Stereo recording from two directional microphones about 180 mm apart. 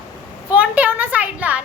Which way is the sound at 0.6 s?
10° right (ahead or behind).